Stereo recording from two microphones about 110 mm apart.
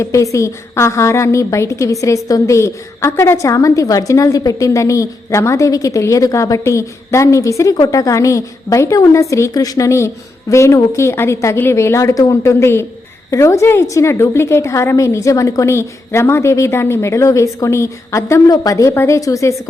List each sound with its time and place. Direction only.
0.0 s a woman's voice: 30° left (ahead or behind)